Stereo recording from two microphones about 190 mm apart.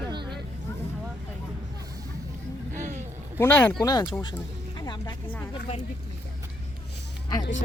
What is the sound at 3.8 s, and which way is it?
Speech, 20° left (ahead or behind).